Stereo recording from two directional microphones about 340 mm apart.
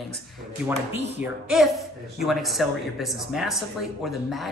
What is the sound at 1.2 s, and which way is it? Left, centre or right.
Speech, centre.